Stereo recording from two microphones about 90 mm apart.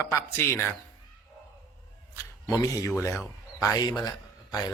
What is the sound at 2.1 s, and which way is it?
Cat, 35° left (ahead or behind).